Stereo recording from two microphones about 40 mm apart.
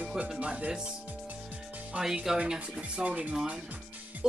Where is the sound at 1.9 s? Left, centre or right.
Right.